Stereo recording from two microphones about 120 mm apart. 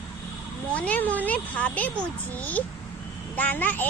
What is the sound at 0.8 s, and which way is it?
A child's voice, 10° left (ahead or behind).